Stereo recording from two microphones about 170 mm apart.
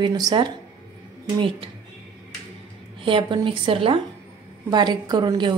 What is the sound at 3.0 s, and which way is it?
A woman's voice, 30° right (ahead or behind).